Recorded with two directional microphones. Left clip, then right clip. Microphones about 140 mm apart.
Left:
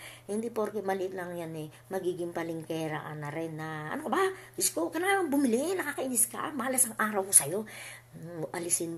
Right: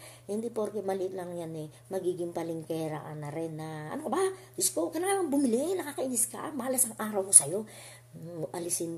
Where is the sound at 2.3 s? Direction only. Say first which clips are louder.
Even; 15° right (ahead or behind).